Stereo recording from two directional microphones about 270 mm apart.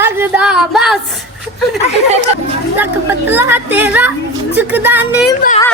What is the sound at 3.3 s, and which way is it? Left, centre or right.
Speech, centre.